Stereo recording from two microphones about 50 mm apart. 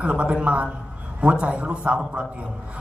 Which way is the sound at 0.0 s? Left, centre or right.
Right.